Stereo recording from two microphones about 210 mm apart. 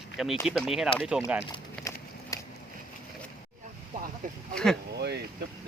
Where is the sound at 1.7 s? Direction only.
15° left (ahead or behind).